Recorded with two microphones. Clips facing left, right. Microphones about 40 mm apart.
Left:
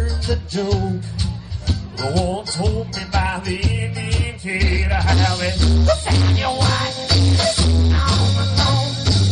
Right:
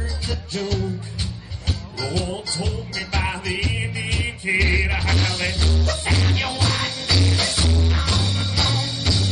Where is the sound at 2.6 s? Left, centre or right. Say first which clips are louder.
Left 4 dB; centre.